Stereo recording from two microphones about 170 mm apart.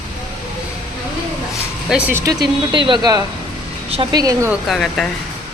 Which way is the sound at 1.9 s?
10° right (ahead or behind).